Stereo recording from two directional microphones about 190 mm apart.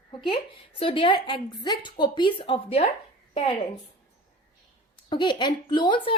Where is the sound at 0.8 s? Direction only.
30° left (ahead or behind).